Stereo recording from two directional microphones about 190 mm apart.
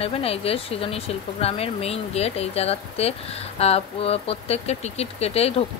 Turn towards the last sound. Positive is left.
turn(degrees=30)  # may be behind; listen again after turning